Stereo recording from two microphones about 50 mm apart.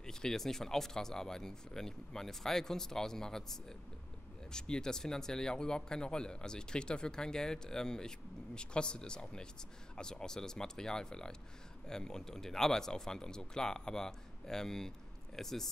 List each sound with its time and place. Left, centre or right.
0.0 s speech: centre